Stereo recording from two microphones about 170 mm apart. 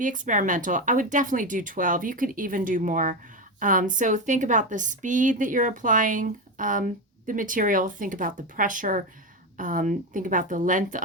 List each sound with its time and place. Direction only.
0.0 s a woman's voice: 50° right (ahead or behind)